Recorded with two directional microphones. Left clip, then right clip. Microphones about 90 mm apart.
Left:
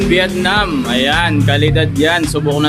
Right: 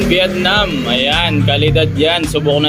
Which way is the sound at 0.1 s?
35° left (ahead or behind).